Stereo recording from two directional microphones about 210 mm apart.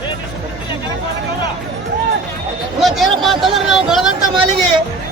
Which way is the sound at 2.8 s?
Centre (ahead or behind).